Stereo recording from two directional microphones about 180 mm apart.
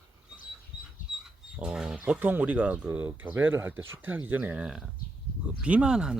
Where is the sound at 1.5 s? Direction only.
5° right (ahead or behind).